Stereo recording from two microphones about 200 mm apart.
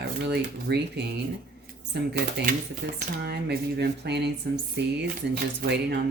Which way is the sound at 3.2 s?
55° right (ahead or behind).